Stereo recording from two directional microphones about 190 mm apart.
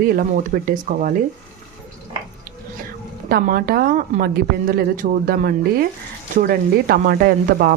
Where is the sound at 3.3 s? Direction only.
50° right (ahead or behind).